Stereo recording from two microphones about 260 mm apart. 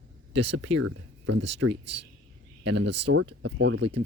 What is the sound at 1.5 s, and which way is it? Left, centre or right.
Speech, right.